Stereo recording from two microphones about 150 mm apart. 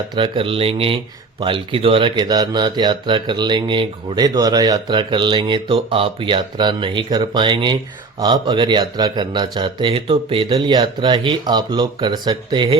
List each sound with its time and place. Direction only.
0.1 s speech: 35° right (ahead or behind)